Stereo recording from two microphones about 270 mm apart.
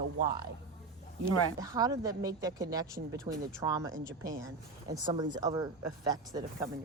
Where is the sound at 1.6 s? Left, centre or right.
Centre.